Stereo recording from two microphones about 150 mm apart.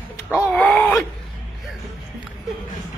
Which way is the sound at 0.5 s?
10° left (ahead or behind).